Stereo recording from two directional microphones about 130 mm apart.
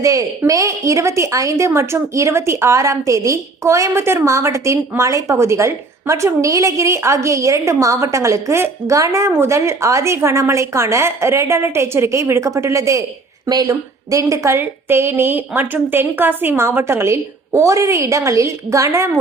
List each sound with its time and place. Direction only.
0.0 s a woman's voice: 25° right (ahead or behind)